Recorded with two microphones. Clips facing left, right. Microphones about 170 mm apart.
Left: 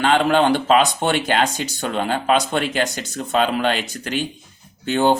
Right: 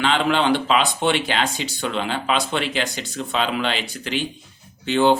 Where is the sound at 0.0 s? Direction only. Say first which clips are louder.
Left 3 dB; 50° left (ahead or behind).